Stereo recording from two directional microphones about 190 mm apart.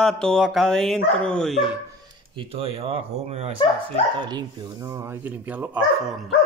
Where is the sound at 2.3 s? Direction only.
30° right (ahead or behind).